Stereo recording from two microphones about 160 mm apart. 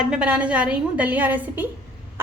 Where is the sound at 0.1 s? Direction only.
5° right (ahead or behind).